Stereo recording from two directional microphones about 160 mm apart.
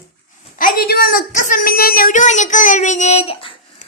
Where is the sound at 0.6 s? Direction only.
65° left (ahead or behind).